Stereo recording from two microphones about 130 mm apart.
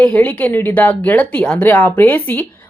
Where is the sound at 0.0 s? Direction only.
10° left (ahead or behind).